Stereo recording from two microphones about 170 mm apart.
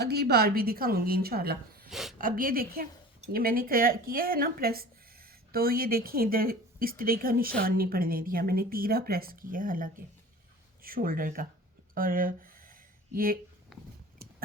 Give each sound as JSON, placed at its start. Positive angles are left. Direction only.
{"t": 0.0, "sound": "a woman's voice", "side_deg": -70}
{"t": 1.9, "sound": "speech", "side_deg": 0}
{"t": 2.1, "sound": "a woman's voice", "side_deg": -55}
{"t": 11.9, "sound": "a sound", "side_deg": -55}
{"t": 13.1, "sound": "a woman's voice", "side_deg": -55}
{"t": 13.7, "sound": "a sound", "side_deg": 0}